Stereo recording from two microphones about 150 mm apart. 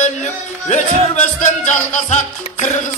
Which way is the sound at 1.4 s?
55° left (ahead or behind).